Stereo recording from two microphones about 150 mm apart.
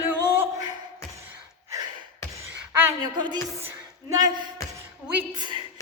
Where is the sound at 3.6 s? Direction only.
15° right (ahead or behind).